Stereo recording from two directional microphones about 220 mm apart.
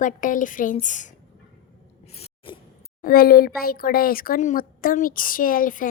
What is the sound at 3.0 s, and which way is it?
A woman's voice, 40° left (ahead or behind).